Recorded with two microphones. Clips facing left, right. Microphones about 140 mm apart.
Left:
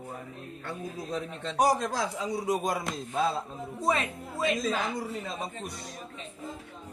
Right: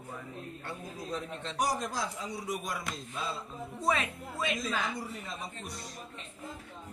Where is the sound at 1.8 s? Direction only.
75° left (ahead or behind).